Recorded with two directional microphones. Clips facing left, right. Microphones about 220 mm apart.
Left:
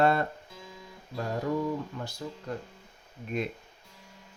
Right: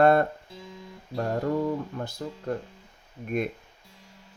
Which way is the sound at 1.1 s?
55° right (ahead or behind).